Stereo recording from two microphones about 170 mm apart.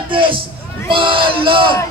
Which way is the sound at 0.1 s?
30° right (ahead or behind).